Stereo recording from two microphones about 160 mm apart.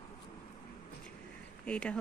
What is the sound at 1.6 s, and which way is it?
Speech, 5° left (ahead or behind).